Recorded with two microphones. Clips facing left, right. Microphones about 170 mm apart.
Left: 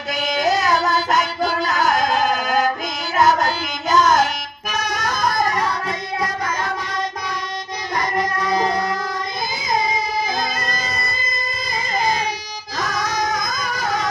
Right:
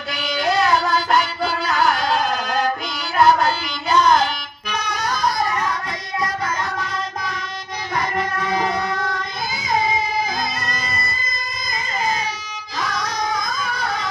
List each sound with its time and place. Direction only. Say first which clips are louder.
0.1 s music: left 2 dB; 40° left (ahead or behind)
7.9 s child singing: left 1 dB; 40° left (ahead or behind)
12.8 s music: left 2 dB; 45° left (ahead or behind)